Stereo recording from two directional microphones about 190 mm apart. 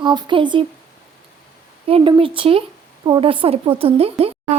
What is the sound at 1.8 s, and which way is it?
A woman's voice, 30° right (ahead or behind).